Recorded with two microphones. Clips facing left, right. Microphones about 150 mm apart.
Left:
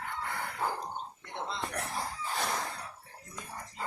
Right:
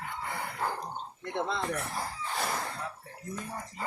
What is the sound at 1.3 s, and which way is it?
Speech, 65° right (ahead or behind).